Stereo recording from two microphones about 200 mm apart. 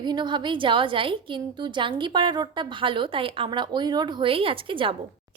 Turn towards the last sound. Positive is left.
turn(degrees=-25)  # may be behind; listen again after turning